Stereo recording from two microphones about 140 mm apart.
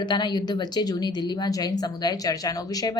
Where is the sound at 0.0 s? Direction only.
30° left (ahead or behind).